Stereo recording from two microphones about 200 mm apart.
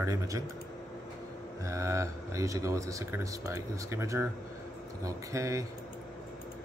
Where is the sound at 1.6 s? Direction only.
15° right (ahead or behind).